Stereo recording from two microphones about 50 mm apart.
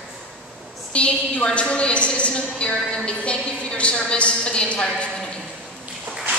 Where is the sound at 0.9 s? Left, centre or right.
Left.